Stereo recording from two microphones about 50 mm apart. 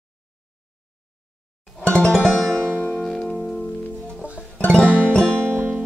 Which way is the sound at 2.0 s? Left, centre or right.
Centre.